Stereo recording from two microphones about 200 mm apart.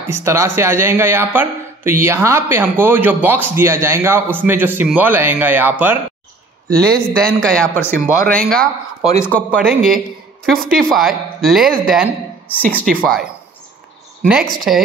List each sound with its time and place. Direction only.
0.0 s a man's voice: 15° right (ahead or behind)
7.2 s speech: 5° left (ahead or behind)